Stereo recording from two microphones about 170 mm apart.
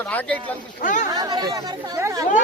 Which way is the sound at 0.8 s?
50° left (ahead or behind).